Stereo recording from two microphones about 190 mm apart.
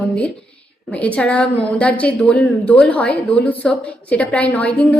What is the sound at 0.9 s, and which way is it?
A woman's voice, 5° left (ahead or behind).